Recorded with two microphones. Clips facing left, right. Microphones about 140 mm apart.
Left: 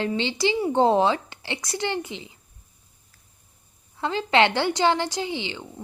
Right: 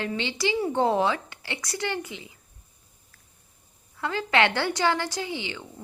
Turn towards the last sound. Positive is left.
turn(degrees=25)  # may be behind; listen again after turning